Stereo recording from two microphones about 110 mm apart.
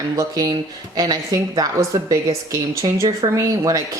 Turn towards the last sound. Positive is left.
turn(degrees=-30)  # may be behind; listen again after turning